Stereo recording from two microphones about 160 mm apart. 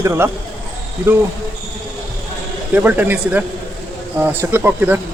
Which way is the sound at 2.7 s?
10° right (ahead or behind).